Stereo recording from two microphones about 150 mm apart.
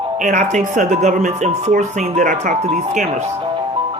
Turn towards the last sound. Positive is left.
turn(degrees=-50)  # may be behind; listen again after turning